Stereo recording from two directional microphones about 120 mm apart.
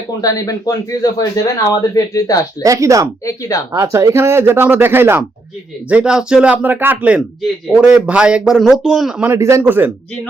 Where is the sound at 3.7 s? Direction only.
25° right (ahead or behind).